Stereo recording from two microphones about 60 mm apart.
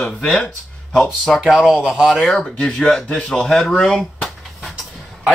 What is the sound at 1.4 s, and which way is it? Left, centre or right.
Speech, centre.